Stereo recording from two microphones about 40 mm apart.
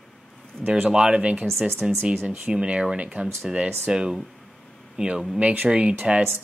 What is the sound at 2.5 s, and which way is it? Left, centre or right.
Speech, right.